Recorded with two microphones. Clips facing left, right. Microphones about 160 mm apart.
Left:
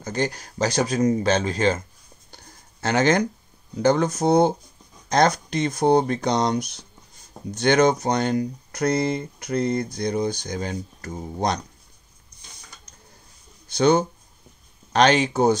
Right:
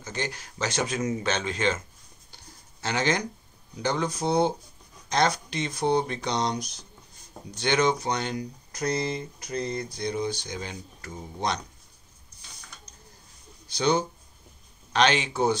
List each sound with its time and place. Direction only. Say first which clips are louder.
0.0 s speech: left 8 dB; 40° left (ahead or behind)
2.3 s a sound: left 3 dB; 50° left (ahead or behind)
3.7 s speech: left 8 dB; 50° left (ahead or behind)
13.7 s speech: left 6 dB; 50° left (ahead or behind)